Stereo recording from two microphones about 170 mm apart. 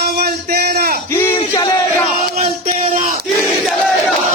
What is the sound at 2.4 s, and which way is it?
Speech, 45° right (ahead or behind).